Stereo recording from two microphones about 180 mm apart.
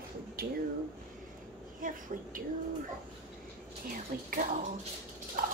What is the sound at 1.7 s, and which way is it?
Speech, 50° right (ahead or behind).